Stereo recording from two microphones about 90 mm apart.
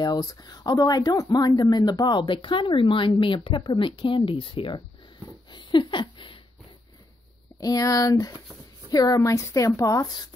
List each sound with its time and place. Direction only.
0.0 s speech: 50° left (ahead or behind); by 4.8 s 75° left (ahead or behind)
5.5 s a sound: 60° left (ahead or behind)
7.6 s speech: 40° left (ahead or behind)